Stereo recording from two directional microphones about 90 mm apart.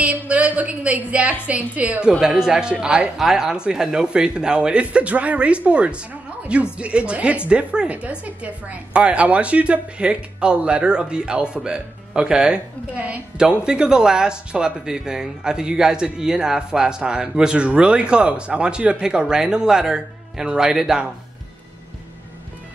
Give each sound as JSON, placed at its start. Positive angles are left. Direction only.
{"t": 0.0, "sound": "a woman's voice", "side_deg": -15}